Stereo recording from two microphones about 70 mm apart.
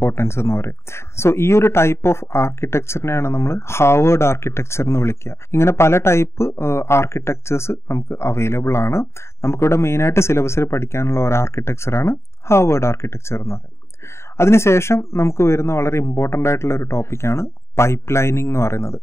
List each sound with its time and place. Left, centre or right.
0.0 s speech: left